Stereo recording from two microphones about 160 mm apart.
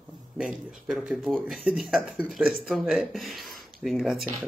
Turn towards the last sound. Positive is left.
turn(degrees=0)  # may be behind; listen again after turning